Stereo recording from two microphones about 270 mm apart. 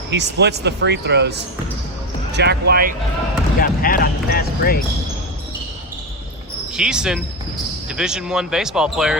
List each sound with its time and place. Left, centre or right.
0.1 s speech: right
2.3 s speech: right
3.6 s speech: left
6.7 s speech: centre